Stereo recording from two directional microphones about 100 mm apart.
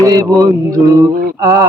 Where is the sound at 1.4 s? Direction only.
30° right (ahead or behind).